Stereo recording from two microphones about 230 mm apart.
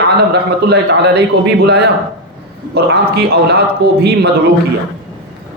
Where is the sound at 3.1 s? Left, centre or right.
Right.